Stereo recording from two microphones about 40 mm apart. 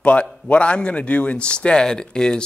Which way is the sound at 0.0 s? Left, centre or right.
Left.